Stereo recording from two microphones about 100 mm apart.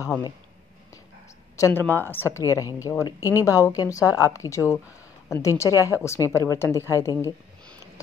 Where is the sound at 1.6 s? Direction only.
20° left (ahead or behind); by 6.3 s 40° left (ahead or behind).